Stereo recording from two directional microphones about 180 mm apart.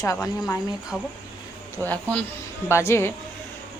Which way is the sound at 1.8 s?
10° left (ahead or behind).